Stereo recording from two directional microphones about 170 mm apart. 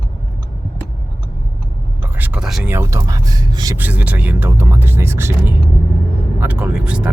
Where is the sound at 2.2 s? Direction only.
5° right (ahead or behind).